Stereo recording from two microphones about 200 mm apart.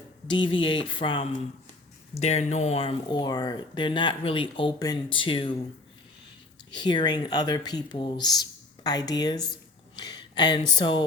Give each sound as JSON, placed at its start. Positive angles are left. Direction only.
{"t": 0.3, "sound": "speech", "side_deg": 25}
{"t": 6.7, "sound": "speech", "side_deg": 20}